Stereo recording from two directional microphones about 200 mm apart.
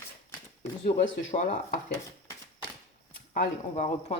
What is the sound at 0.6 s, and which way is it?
Speech, 35° left (ahead or behind).